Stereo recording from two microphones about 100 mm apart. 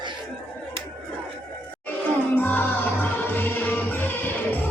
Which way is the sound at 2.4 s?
15° left (ahead or behind).